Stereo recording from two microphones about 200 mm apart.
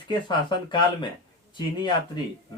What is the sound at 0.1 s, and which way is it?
Speech, 25° left (ahead or behind).